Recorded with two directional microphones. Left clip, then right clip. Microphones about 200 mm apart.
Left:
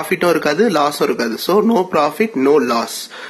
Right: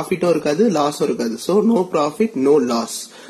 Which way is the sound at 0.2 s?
10° left (ahead or behind).